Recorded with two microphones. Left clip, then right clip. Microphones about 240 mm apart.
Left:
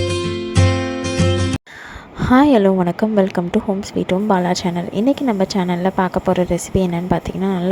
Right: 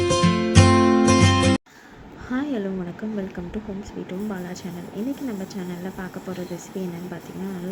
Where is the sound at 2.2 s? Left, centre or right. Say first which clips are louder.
Left 15 dB; left.